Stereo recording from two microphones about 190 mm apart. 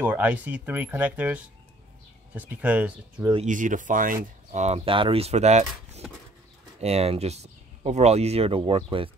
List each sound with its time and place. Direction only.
0.0 s speech: 10° right (ahead or behind)
3.3 s speech: 40° right (ahead or behind)